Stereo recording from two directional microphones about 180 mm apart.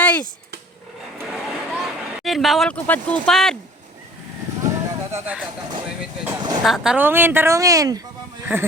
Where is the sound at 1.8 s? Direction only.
Centre (ahead or behind).